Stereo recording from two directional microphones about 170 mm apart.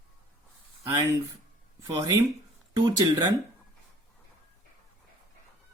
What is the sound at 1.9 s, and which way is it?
Speech, 25° right (ahead or behind).